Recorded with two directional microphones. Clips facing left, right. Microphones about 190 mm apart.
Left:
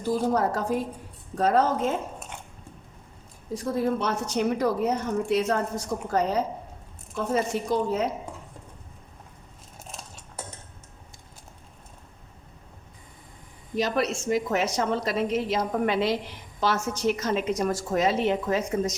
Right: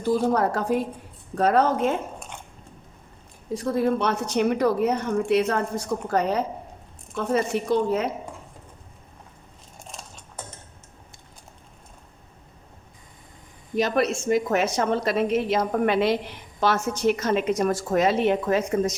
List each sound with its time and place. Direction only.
0.3 s a woman's voice: 65° right (ahead or behind)
3.5 s a woman's voice: 65° right (ahead or behind)
7.5 s a woman's voice: 65° right (ahead or behind)
9.8 s a sound: centre (ahead or behind)
13.7 s a woman's voice: 55° right (ahead or behind)